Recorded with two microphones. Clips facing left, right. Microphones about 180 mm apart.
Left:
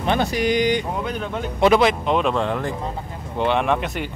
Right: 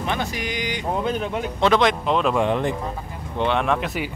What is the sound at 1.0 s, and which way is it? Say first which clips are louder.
Speech: right 2 dB; 20° right (ahead or behind).